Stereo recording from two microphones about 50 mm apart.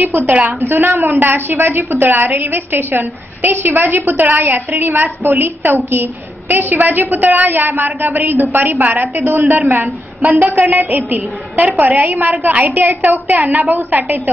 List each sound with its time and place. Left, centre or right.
0.3 s a woman's voice: right
0.7 s a woman's voice: right